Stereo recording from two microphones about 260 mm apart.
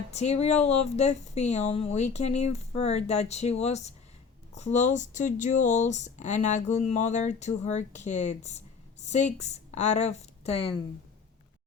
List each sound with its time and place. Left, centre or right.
0.1 s speech: left